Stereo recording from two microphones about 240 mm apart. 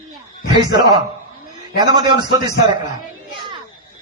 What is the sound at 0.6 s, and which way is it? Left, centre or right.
Speech, centre.